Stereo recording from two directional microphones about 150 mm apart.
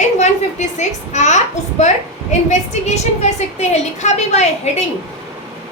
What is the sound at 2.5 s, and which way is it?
A woman's voice, 50° left (ahead or behind).